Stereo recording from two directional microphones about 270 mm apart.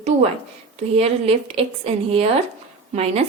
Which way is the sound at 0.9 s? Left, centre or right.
Right.